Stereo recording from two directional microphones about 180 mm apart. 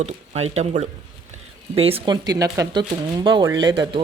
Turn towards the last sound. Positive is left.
turn(degrees=-25)  # may be behind; listen again after turning